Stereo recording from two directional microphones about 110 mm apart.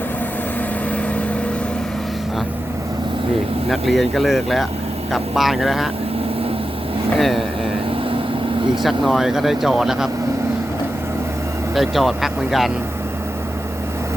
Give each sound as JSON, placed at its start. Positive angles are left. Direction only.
{"t": 3.7, "sound": "speech", "side_deg": 0}
{"t": 7.2, "sound": "speech", "side_deg": 0}
{"t": 8.7, "sound": "speech", "side_deg": 0}
{"t": 11.7, "sound": "speech", "side_deg": 0}